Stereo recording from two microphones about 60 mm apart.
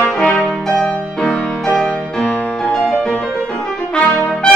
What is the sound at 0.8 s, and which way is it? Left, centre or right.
Music, centre.